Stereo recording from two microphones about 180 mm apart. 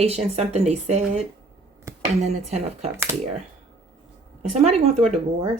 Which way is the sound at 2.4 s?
35° right (ahead or behind).